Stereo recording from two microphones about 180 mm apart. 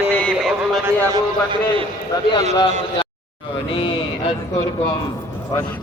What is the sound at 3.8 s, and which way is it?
Speech, 30° left (ahead or behind).